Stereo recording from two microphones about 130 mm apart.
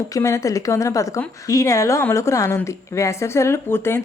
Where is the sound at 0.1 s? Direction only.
25° left (ahead or behind).